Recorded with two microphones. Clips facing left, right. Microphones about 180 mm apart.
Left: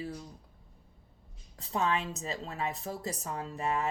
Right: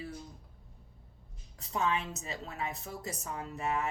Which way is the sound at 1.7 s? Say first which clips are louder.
Left 2 dB; 35° left (ahead or behind).